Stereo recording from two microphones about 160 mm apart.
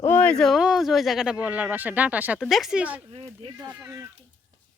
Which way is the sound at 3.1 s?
40° right (ahead or behind).